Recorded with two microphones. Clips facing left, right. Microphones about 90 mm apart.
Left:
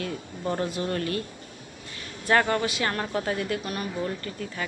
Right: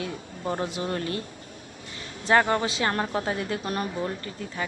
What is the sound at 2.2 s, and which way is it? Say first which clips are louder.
A woman's voice: right 1 dB; 20° right (ahead or behind).